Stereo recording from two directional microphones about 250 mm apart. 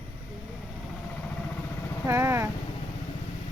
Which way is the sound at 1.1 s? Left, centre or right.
Centre.